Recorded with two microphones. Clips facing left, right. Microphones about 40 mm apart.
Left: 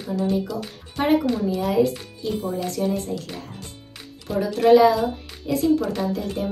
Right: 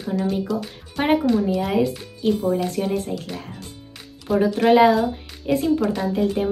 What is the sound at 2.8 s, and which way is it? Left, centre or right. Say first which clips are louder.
Speech: even; right.